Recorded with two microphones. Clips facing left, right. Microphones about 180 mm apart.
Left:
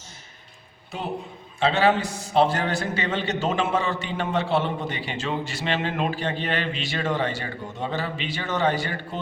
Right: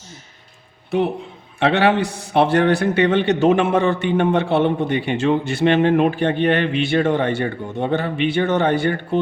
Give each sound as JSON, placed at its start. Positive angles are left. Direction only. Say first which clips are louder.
{"t": 0.9, "sound": "a woman's voice", "louder": "right 11 dB", "side_deg": -65}